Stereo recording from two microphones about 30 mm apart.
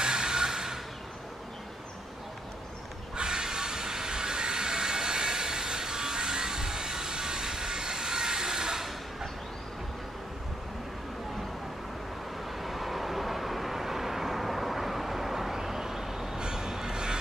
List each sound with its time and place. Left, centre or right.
0.0 s a sound: right
3.2 s train: right
12.5 s vehicle: centre
16.3 s train: right